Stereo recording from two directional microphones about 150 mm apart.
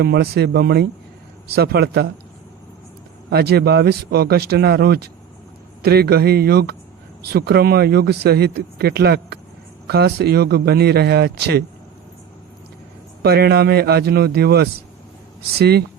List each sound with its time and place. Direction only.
0.0 s speech: 90° right
3.2 s speech: 90° right
13.2 s speech: 90° right